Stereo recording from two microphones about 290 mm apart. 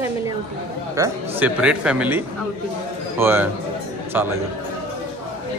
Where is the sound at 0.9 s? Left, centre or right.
Centre.